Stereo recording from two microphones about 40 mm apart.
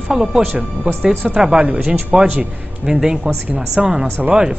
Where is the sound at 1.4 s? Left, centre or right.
Centre.